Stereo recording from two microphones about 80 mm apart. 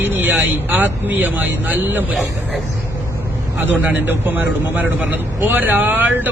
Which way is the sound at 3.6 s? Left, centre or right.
Right.